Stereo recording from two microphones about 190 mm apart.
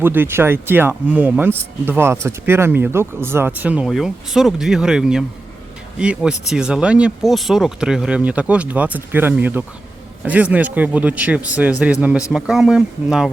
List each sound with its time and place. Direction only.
0.0 s speech: 10° right (ahead or behind)